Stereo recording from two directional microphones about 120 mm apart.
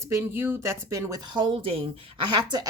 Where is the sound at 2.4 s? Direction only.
35° right (ahead or behind).